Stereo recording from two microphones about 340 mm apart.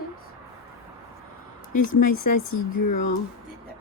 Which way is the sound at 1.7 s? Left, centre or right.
Left.